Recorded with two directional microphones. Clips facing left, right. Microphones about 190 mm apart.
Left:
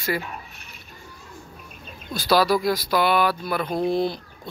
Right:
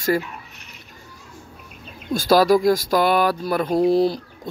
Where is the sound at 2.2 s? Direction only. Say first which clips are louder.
Right 4 dB; 45° right (ahead or behind).